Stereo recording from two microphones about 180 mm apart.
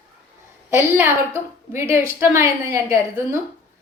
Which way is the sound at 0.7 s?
15° right (ahead or behind).